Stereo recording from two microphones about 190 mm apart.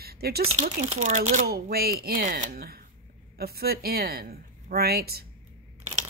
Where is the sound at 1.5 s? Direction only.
55° right (ahead or behind).